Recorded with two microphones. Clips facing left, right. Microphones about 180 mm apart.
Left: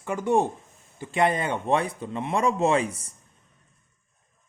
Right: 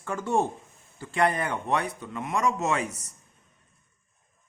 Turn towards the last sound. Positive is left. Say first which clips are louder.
# left 5 dB
turn(degrees=30)  # may be behind; listen again after turning